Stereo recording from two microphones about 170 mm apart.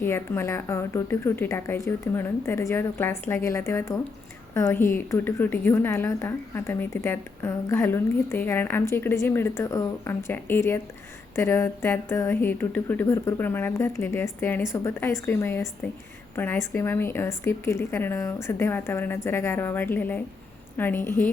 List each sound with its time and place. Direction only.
0.0 s a woman's voice: 15° left (ahead or behind)